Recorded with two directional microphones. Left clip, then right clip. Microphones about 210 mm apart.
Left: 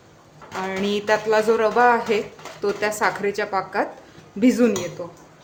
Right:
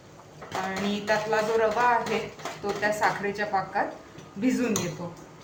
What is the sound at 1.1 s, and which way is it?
A woman's voice, 55° left (ahead or behind).